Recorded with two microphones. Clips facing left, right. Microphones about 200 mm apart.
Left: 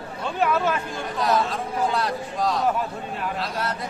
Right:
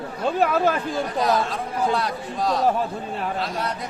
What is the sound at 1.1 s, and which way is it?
Speech, centre (ahead or behind).